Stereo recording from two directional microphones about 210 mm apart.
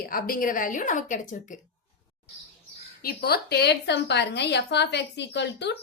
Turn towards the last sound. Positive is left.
turn(degrees=55)  # may be behind; listen again after turning